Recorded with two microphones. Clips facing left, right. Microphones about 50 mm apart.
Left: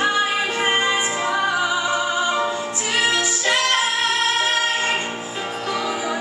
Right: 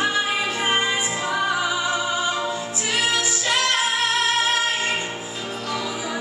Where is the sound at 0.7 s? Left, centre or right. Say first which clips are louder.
Left 2 dB; centre.